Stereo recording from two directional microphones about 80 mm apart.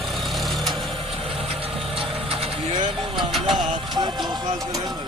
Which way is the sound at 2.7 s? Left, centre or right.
Right.